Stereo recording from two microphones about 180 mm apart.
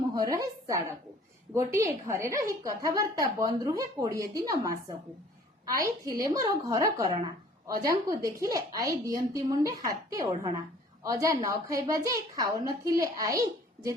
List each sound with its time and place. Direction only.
0.1 s a woman's voice: 20° right (ahead or behind)